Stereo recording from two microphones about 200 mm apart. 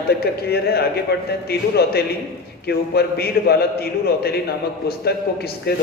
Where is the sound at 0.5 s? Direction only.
50° left (ahead or behind).